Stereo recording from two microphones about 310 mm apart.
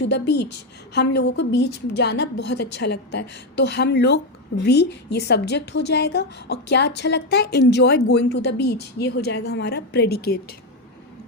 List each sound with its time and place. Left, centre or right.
0.0 s a woman's voice: left